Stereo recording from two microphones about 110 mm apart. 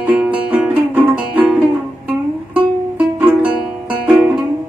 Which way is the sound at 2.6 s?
10° right (ahead or behind).